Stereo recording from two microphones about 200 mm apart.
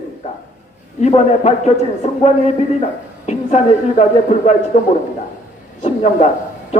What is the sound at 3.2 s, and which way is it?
A man's voice, 35° left (ahead or behind).